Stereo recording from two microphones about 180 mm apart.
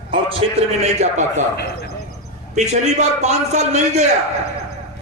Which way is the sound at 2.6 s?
40° right (ahead or behind).